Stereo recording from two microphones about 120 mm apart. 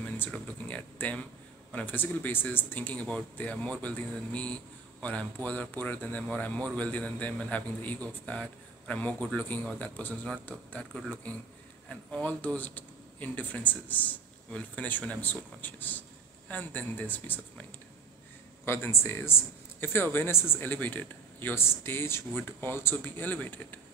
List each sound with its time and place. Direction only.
0.0 s a sound: 10° left (ahead or behind)
1.7 s a man's voice: 15° left (ahead or behind)
18.7 s speech: 20° left (ahead or behind)